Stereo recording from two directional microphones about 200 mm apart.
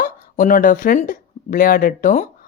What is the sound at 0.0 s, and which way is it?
Speech, 45° left (ahead or behind).